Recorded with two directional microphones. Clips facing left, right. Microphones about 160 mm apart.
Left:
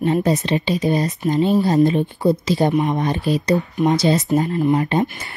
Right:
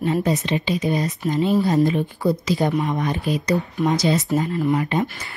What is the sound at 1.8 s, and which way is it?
Speech, 25° left (ahead or behind).